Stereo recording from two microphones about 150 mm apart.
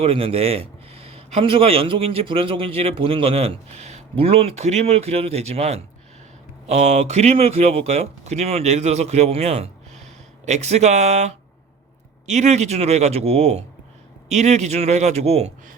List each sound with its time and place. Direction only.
0.0 s a man's voice: 40° right (ahead or behind)